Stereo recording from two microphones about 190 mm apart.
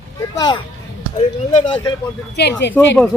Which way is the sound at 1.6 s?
25° left (ahead or behind).